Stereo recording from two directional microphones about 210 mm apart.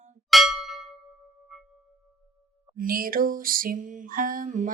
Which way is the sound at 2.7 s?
45° right (ahead or behind).